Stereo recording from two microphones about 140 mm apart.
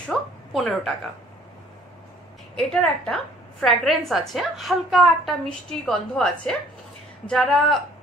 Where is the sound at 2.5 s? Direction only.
5° left (ahead or behind).